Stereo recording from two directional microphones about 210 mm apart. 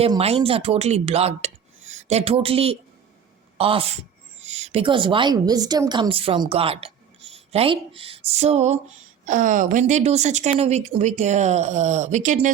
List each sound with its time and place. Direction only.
0.0 s a woman's voice: 30° right (ahead or behind)